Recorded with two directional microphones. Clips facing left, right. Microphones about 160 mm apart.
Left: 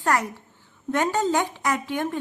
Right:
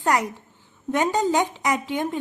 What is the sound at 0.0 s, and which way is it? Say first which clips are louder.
A woman's voice: right 1 dB; 15° right (ahead or behind).